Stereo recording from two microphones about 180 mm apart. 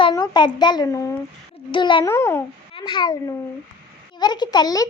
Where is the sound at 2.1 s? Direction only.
15° left (ahead or behind).